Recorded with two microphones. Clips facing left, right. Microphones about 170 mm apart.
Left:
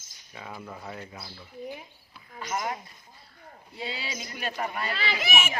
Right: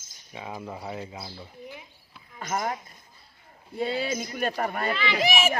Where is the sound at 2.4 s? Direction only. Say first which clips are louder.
Right 2 dB; 45° right (ahead or behind).